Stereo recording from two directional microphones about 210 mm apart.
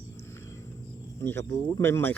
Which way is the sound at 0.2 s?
15° left (ahead or behind).